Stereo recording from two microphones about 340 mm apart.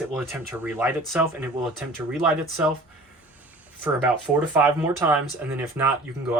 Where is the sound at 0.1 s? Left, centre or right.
Centre.